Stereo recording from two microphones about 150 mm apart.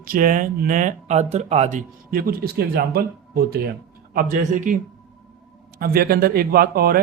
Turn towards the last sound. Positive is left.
turn(degrees=-90)